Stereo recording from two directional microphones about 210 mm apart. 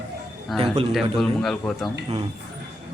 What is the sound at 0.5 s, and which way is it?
Speech, centre (ahead or behind).